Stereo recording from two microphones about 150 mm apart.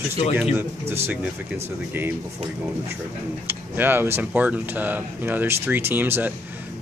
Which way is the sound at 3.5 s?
15° right (ahead or behind).